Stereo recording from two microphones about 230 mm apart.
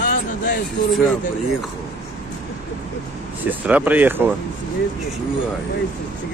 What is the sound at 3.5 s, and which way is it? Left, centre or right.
Speech, centre.